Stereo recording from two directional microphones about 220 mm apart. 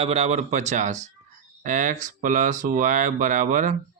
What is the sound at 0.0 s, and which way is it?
Speech, 30° right (ahead or behind).